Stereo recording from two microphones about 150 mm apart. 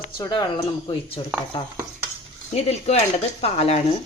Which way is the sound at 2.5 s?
45° left (ahead or behind).